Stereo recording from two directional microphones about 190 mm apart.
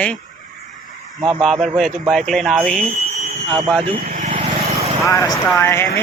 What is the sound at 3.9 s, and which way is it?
Vehicle, 45° right (ahead or behind).